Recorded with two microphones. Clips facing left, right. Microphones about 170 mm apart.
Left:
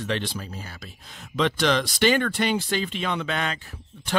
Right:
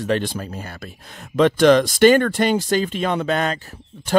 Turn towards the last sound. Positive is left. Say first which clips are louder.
# right 7 dB
turn(degrees=-40)  # may be behind; listen again after turning